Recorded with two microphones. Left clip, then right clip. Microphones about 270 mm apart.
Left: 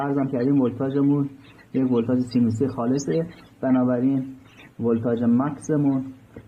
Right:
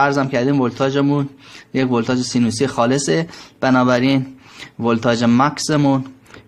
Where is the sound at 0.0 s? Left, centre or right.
Right.